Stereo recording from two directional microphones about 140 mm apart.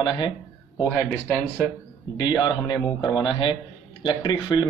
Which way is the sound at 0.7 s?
15° left (ahead or behind).